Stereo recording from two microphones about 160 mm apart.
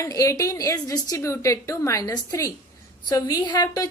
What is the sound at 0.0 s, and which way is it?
A woman's voice, 20° left (ahead or behind).